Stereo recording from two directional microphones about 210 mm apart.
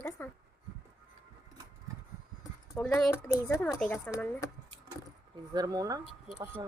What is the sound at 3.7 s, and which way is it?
Speech, 10° left (ahead or behind).